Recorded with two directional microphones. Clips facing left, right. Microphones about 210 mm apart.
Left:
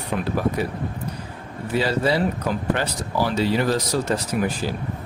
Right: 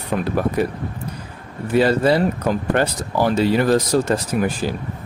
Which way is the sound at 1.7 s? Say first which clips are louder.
Right 6 dB; 50° right (ahead or behind).